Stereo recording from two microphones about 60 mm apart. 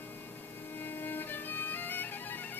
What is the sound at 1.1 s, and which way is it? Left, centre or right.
Music, left.